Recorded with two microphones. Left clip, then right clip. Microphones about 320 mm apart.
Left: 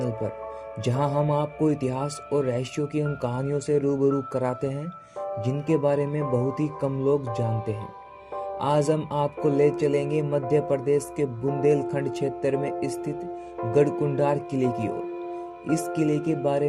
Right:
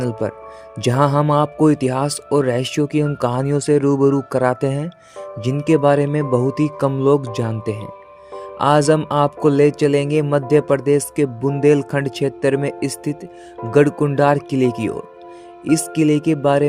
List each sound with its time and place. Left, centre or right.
0.8 s speech: right